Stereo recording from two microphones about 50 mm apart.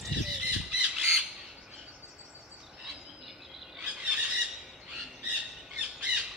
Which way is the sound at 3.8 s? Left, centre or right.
Right.